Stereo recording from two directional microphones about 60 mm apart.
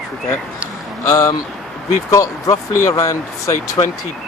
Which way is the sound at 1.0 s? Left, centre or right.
Left.